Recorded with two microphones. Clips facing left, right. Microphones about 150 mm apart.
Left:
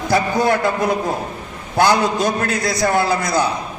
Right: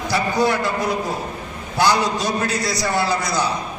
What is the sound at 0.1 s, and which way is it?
Speech, 50° left (ahead or behind).